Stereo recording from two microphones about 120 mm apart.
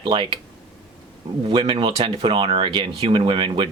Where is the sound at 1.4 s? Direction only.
45° right (ahead or behind).